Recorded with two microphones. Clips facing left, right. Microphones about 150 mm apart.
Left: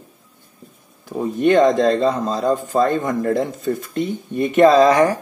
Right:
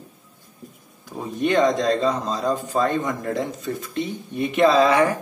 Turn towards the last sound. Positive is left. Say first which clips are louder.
# left 4 dB
turn(degrees=40)  # may be behind; listen again after turning